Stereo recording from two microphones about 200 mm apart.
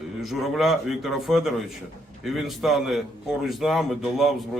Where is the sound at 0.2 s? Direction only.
Centre (ahead or behind).